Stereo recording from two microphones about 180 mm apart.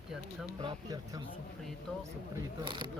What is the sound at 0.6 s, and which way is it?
Speech, 25° right (ahead or behind).